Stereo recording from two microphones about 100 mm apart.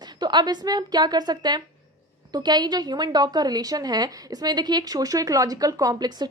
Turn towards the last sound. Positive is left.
turn(degrees=-45)  # may be behind; listen again after turning